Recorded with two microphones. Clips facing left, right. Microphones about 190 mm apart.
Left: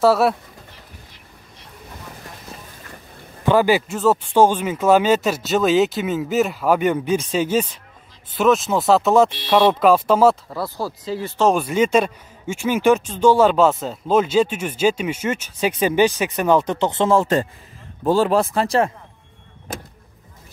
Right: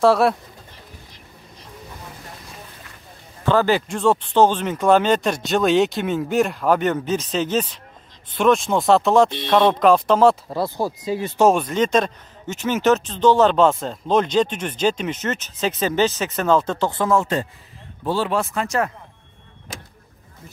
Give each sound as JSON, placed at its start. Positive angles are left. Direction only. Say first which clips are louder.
{"t": 0.0, "sound": "speech", "louder": "even", "side_deg": 5}
{"t": 3.4, "sound": "speech", "louder": "left 2 dB", "side_deg": 10}
{"t": 10.5, "sound": "speech", "louder": "right 3 dB", "side_deg": -20}
{"t": 11.5, "sound": "speech", "louder": "left 2 dB", "side_deg": 10}
{"t": 18.0, "sound": "speech", "louder": "left 5 dB", "side_deg": 45}